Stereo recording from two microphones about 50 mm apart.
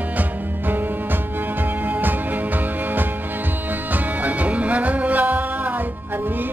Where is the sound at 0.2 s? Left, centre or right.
Right.